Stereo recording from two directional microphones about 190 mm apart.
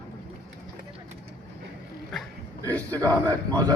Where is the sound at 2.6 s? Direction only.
10° left (ahead or behind).